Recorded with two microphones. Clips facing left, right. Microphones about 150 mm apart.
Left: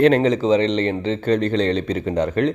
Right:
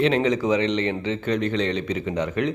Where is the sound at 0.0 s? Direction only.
40° left (ahead or behind).